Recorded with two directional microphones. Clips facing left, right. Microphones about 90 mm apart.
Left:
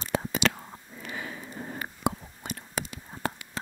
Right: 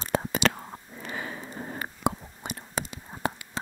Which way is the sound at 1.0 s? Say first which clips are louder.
Right 2 dB; 40° right (ahead or behind).